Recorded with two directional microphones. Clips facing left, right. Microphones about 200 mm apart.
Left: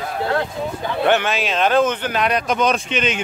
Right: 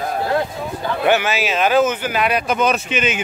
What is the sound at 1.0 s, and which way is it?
Speech, 5° right (ahead or behind).